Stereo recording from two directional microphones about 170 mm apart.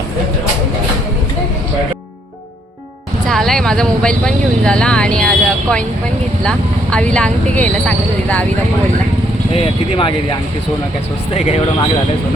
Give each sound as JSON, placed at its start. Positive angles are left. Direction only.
{"t": 3.2, "sound": "speech", "side_deg": 0}
{"t": 11.3, "sound": "speech", "side_deg": 35}